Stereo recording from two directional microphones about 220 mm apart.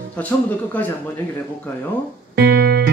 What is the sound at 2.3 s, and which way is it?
Music, 50° right (ahead or behind).